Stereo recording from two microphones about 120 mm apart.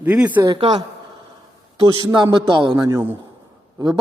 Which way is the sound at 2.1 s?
40° right (ahead or behind).